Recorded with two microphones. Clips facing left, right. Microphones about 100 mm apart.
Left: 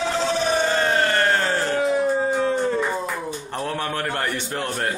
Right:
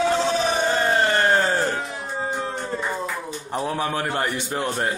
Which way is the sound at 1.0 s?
20° right (ahead or behind).